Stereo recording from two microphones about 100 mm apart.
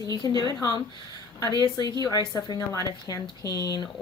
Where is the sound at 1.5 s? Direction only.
40° right (ahead or behind).